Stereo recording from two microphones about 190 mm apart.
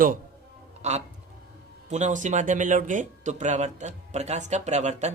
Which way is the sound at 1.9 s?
40° right (ahead or behind).